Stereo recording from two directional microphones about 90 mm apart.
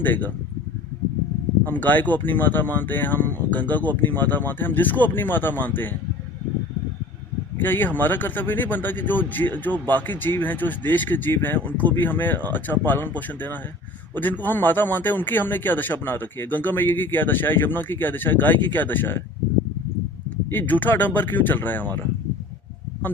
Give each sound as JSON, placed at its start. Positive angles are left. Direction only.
{"t": 0.0, "sound": "speech", "side_deg": 20}
{"t": 1.6, "sound": "speech", "side_deg": 20}
{"t": 7.6, "sound": "speech", "side_deg": 20}
{"t": 20.5, "sound": "speech", "side_deg": 20}